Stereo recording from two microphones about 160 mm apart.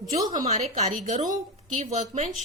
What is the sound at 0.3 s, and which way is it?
A woman's voice, 45° right (ahead or behind).